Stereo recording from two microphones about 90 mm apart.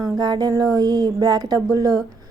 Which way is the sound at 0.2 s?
50° right (ahead or behind).